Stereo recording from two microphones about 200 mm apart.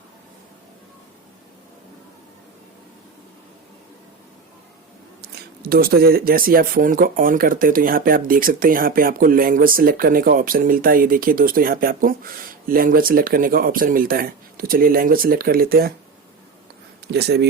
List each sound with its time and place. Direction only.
5.2 s speech: 50° right (ahead or behind)
17.1 s speech: 55° right (ahead or behind)